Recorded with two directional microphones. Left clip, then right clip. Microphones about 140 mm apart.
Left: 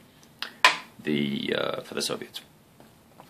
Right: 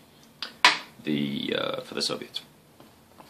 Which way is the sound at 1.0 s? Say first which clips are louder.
Left 2 dB; 50° left (ahead or behind).